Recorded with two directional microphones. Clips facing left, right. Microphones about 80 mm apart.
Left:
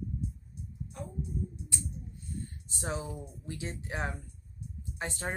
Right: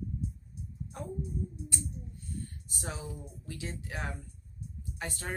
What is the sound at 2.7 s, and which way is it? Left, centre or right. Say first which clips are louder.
Speech: left 5 dB; left.